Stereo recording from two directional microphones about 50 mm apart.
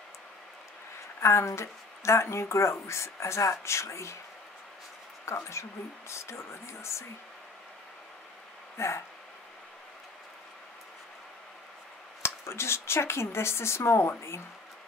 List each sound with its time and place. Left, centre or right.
1.2 s speech: left
5.2 s speech: left
8.7 s speech: left
12.2 s speech: left